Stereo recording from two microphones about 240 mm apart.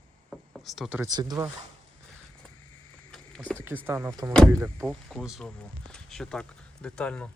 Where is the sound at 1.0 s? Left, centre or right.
Centre.